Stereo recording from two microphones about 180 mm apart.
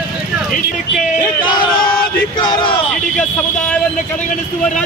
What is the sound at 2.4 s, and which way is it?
Speech, 25° left (ahead or behind).